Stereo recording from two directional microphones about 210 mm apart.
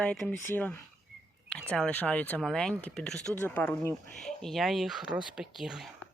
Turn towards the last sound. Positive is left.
turn(degrees=0)  # may be behind; listen again after turning